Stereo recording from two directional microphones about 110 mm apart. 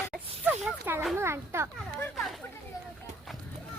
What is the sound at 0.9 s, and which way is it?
Speech, 20° right (ahead or behind).